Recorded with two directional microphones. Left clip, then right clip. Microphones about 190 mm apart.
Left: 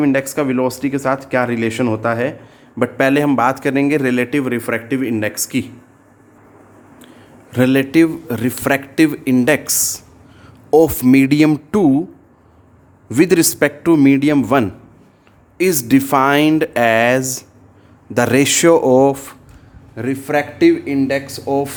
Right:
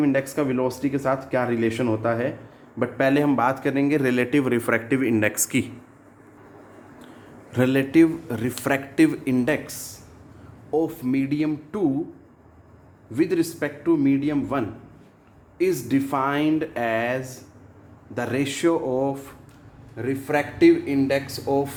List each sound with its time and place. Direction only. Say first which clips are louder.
0.0 s a man's voice: left 6 dB; 20° left (ahead or behind)
7.5 s speech: left 6 dB; 25° left (ahead or behind); by 10.0 s 45° left (ahead or behind)
10.7 s speech: left 13 dB; 55° left (ahead or behind)
13.1 s speech: left 10 dB; 55° left (ahead or behind)
20.0 s speech: left 6 dB; 45° left (ahead or behind)